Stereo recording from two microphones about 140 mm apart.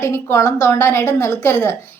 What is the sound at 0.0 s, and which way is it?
A woman's voice, 20° left (ahead or behind).